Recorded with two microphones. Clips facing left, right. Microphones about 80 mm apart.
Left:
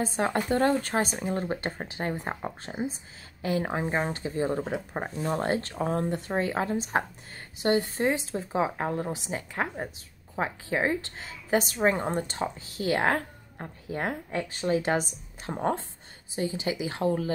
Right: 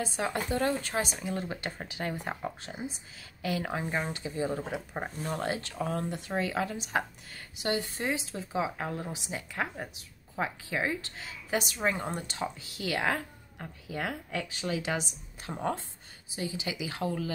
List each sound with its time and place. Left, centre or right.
0.0 s speech: left
4.7 s speech: left